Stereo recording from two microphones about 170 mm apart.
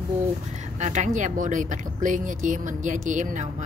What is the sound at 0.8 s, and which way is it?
Speech, 45° right (ahead or behind).